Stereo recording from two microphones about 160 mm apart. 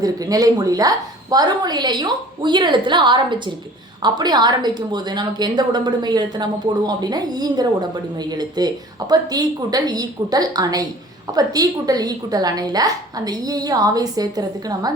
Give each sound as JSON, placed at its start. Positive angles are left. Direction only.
{"t": 0.0, "sound": "a woman's voice", "side_deg": -25}